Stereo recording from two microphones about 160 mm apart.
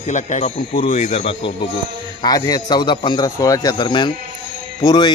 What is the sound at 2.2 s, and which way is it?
A man's voice, 25° left (ahead or behind).